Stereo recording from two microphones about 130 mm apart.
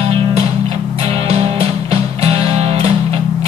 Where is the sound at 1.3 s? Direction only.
50° right (ahead or behind).